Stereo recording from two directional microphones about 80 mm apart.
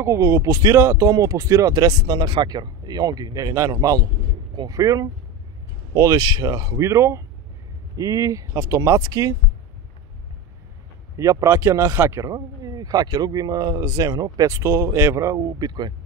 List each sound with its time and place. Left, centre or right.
0.0 s speech: right
2.1 s speech: right
3.8 s speech: right
11.1 s speech: right
14.5 s speech: right
15.3 s speech: right